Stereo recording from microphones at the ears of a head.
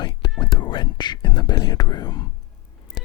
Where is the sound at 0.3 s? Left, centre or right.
Left.